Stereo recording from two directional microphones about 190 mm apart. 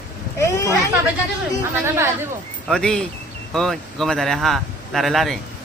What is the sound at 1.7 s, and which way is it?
Speech, 15° right (ahead or behind).